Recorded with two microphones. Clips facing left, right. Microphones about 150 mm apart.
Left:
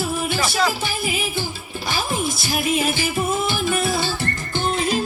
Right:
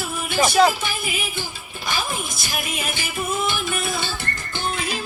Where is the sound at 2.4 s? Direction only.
25° left (ahead or behind).